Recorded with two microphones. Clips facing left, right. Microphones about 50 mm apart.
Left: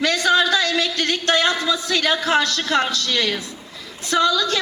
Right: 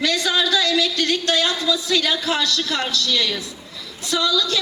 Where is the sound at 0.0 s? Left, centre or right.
Left.